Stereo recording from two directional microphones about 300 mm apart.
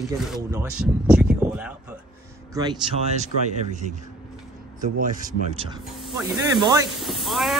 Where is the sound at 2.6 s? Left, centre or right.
Centre.